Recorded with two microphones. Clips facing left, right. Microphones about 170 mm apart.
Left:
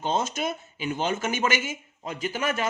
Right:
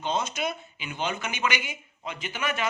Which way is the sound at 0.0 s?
45° left (ahead or behind).